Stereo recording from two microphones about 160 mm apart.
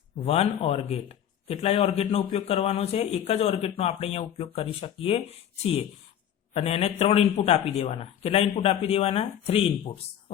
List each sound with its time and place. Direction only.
0.3 s a man's voice: 40° left (ahead or behind)
6.5 s a man's voice: 40° left (ahead or behind)